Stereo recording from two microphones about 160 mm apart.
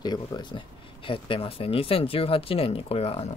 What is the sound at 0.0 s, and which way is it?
Speech, 25° left (ahead or behind).